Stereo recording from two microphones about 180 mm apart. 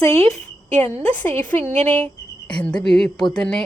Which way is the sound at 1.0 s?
10° left (ahead or behind).